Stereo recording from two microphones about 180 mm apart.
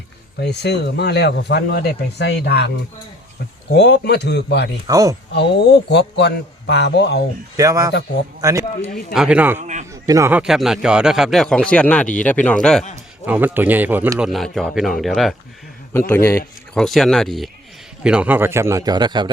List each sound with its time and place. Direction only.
0.3 s speech: 65° left (ahead or behind)
4.9 s speech: 20° right (ahead or behind)
5.3 s speech: 70° left (ahead or behind)
7.5 s speech: 20° right (ahead or behind)
9.1 s a man's voice: 5° right (ahead or behind)
9.6 s a man's voice: 40° right (ahead or behind)
9.9 s speech: 15° right (ahead or behind)
10.4 s speech: centre (ahead or behind)
13.2 s speech: 10° right (ahead or behind)
15.9 s speech: 10° left (ahead or behind)
16.7 s a man's voice: centre (ahead or behind); by 19.3 s 25° right (ahead or behind)